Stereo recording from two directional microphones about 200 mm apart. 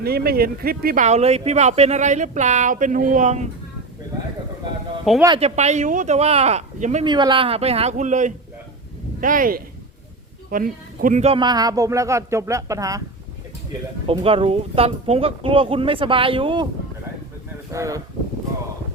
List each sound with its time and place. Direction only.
0.0 s speech: 50° right (ahead or behind)
5.1 s a man's voice: centre (ahead or behind)
5.4 s speech: 35° right (ahead or behind)
7.0 s a man's voice: 20° right (ahead or behind)
14.1 s speech: 25° right (ahead or behind)
17.7 s speech: 15° right (ahead or behind)